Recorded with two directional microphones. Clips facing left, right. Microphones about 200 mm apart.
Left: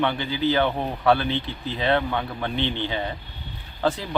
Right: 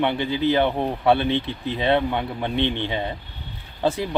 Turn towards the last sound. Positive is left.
turn(degrees=-25)  # may be behind; listen again after turning